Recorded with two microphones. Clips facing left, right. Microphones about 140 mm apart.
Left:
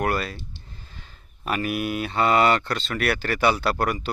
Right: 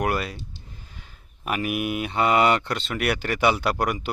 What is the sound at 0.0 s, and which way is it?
Speech, 15° right (ahead or behind).